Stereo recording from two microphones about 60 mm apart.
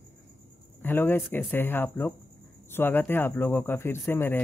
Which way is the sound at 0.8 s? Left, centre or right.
Left.